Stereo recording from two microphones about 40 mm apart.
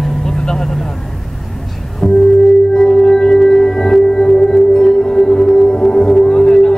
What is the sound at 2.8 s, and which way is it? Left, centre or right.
Music, centre.